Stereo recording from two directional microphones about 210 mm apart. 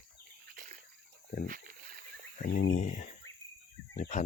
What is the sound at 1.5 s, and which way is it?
Wild animals, 40° right (ahead or behind).